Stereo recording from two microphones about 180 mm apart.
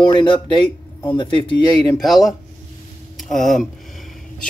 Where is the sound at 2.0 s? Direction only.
Centre (ahead or behind).